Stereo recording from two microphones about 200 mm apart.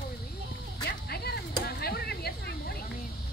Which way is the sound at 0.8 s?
50° left (ahead or behind).